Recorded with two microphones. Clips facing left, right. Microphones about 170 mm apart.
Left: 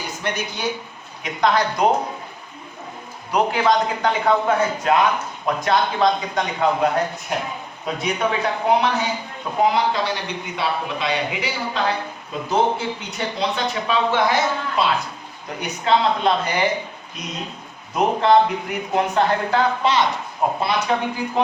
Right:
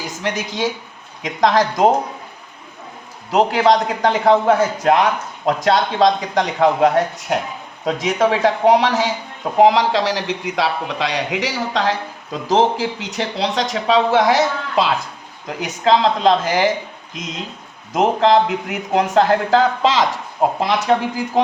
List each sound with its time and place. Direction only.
0.2 s a man's voice: 90° right
3.3 s a man's voice: 90° right
17.9 s a man's voice: 90° right